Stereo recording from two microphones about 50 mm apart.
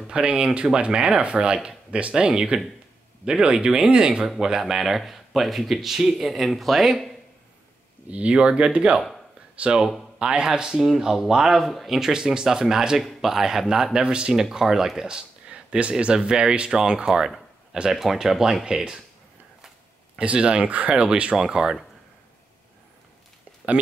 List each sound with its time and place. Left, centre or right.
0.1 s speech: centre
8.1 s speech: right
20.2 s speech: right